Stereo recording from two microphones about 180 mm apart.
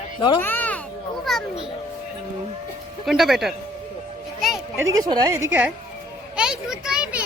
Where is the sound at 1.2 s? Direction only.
Centre (ahead or behind).